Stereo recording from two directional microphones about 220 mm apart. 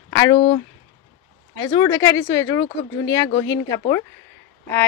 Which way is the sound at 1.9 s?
15° left (ahead or behind).